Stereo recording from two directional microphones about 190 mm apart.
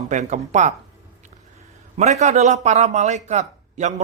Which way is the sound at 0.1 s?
40° right (ahead or behind).